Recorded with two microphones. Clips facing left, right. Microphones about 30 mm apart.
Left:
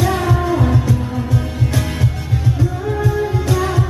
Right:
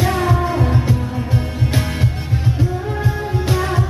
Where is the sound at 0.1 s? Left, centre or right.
Centre.